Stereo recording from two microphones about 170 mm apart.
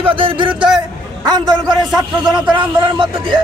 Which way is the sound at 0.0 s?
30° right (ahead or behind).